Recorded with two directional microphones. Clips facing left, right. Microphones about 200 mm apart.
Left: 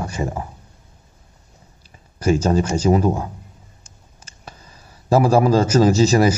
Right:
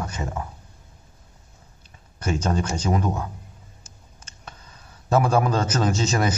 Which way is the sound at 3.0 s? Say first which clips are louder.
Left 7 dB; 25° left (ahead or behind).